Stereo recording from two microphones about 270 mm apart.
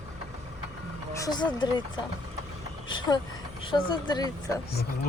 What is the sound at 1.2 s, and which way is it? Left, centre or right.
Speech, centre.